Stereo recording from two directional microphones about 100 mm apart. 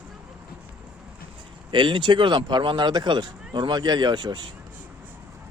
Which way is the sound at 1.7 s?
50° right (ahead or behind).